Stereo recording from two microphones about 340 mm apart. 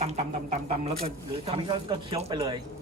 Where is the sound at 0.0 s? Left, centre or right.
Centre.